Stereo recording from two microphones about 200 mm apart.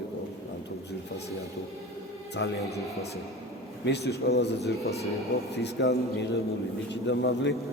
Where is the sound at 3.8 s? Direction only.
55° left (ahead or behind).